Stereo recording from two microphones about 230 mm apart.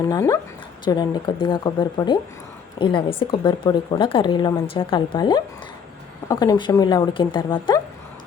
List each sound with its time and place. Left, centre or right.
0.0 s speech: centre